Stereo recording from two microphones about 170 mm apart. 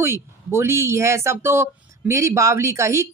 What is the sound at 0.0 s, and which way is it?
Speech, 15° right (ahead or behind).